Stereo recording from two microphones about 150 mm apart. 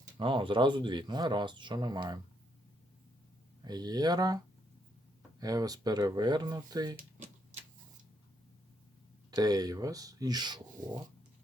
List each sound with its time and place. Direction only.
0.2 s speech: 35° right (ahead or behind)
3.6 s speech: 25° right (ahead or behind)
5.4 s speech: 25° right (ahead or behind)
9.3 s speech: 25° right (ahead or behind)